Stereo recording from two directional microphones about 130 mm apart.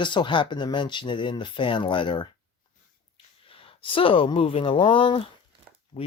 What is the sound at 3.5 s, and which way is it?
Speech, 45° left (ahead or behind).